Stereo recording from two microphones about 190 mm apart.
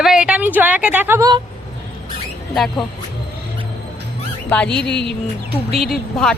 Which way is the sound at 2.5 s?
Centre (ahead or behind).